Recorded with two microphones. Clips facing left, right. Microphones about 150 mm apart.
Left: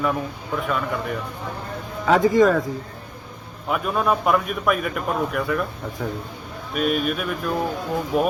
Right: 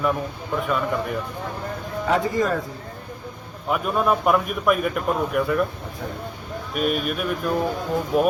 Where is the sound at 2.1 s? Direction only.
90° left.